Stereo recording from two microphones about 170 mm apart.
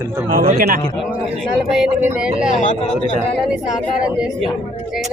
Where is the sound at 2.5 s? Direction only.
50° left (ahead or behind).